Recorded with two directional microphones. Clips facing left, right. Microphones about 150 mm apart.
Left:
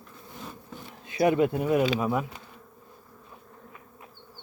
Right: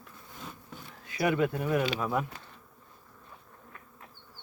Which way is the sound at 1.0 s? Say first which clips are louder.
Left 5 dB; 25° left (ahead or behind).